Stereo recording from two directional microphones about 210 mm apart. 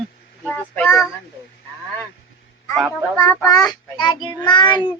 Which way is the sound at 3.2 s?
15° left (ahead or behind).